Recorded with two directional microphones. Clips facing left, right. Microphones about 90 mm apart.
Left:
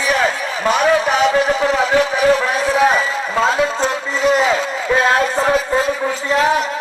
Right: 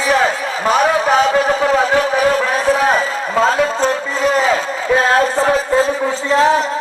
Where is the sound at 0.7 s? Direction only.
35° right (ahead or behind).